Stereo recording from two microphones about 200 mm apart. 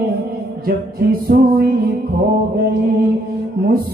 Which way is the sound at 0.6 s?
50° right (ahead or behind).